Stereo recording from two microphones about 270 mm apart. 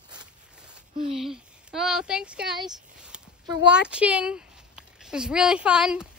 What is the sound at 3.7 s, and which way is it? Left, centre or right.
A woman's voice, centre.